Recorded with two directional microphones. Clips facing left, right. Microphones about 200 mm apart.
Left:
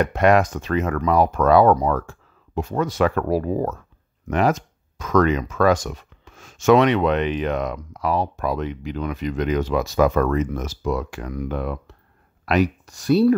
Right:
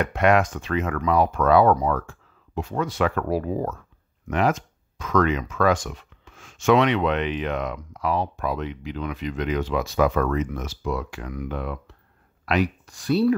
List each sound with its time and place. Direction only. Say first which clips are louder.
0.0 s speech: left 3 dB; 40° left (ahead or behind)